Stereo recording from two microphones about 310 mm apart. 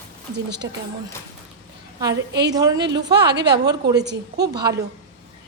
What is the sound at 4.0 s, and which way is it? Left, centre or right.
Speech, right.